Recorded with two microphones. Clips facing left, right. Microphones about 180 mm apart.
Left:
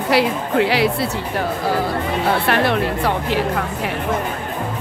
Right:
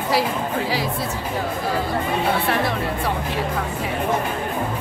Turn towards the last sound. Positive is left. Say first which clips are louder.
# left 4 dB
turn(degrees=70)  # may be behind; listen again after turning